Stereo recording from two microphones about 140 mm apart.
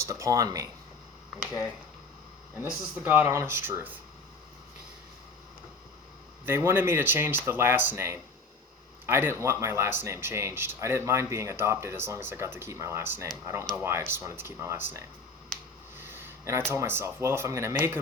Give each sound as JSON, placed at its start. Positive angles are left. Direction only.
{"t": 0.0, "sound": "speech", "side_deg": -20}
{"t": 2.6, "sound": "speech", "side_deg": -10}
{"t": 6.4, "sound": "speech", "side_deg": -15}
{"t": 15.5, "sound": "finger snapping", "side_deg": 5}
{"t": 16.0, "sound": "a sound", "side_deg": -15}
{"t": 16.7, "sound": "speech", "side_deg": -15}